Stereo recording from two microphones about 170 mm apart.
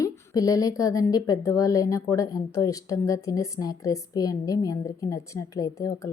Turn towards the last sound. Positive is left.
turn(degrees=20)  # may be behind; listen again after turning